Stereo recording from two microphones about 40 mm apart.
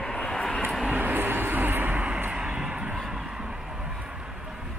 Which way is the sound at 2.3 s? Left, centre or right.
Centre.